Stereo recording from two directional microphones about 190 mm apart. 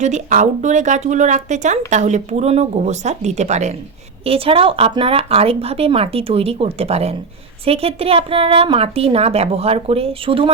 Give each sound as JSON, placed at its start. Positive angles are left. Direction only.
{"t": 0.0, "sound": "a woman's voice", "side_deg": -40}